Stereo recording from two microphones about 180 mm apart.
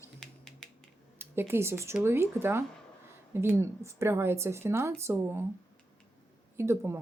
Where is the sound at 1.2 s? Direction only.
15° right (ahead or behind).